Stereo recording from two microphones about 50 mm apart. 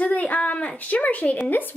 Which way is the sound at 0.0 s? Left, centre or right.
Left.